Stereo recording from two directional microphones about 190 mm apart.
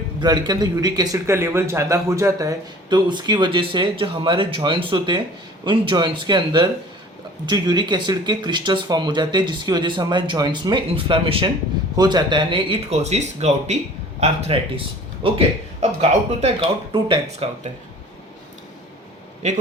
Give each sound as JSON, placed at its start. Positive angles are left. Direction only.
{"t": 0.2, "sound": "a man's voice", "side_deg": -20}